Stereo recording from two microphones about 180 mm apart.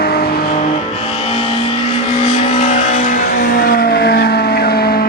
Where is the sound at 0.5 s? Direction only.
35° left (ahead or behind).